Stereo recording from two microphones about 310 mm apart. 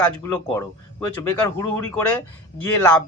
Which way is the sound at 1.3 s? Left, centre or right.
Centre.